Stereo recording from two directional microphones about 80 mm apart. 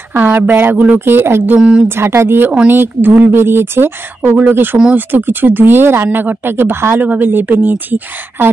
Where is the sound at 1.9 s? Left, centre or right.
Right.